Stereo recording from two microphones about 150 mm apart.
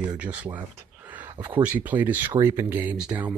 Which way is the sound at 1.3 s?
30° right (ahead or behind).